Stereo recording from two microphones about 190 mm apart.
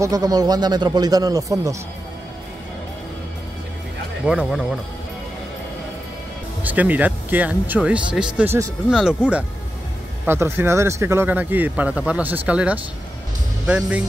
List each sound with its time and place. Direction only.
0.0 s a man's voice: 20° right (ahead or behind)
4.3 s speech: 5° right (ahead or behind)
6.6 s speech: 10° right (ahead or behind)
8.9 s speech: 5° right (ahead or behind)